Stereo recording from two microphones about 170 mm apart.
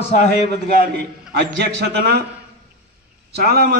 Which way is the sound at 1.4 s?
80° right.